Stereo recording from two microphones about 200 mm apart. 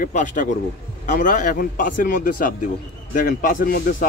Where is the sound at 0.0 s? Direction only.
35° left (ahead or behind).